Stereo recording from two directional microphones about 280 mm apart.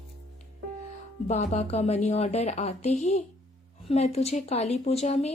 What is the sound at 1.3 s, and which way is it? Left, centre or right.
A woman's voice, left.